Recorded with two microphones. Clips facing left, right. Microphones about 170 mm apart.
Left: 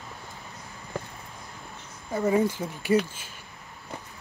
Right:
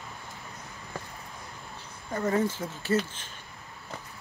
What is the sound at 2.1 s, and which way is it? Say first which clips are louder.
Speech: left 3 dB; 10° left (ahead or behind).